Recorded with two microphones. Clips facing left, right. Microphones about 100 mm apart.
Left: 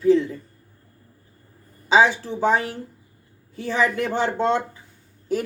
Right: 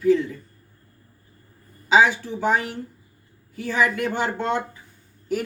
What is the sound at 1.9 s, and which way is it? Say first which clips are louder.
A woman's voice: even; 30° left (ahead or behind).